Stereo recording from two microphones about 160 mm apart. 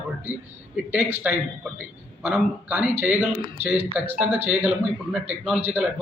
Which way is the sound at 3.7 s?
40° right (ahead or behind).